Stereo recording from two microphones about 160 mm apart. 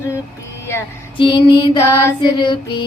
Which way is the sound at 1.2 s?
35° left (ahead or behind).